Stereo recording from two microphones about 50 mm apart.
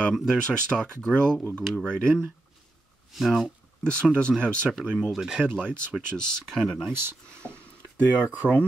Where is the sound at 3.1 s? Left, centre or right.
Centre.